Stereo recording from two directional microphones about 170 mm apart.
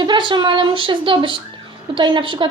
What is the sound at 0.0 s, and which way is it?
A woman's voice, 25° right (ahead or behind).